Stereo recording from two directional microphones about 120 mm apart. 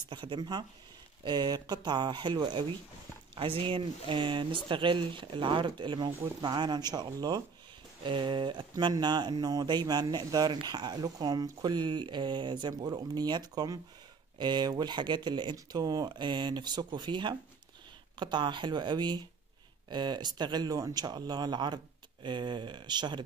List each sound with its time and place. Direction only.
0.1 s speech: 40° right (ahead or behind)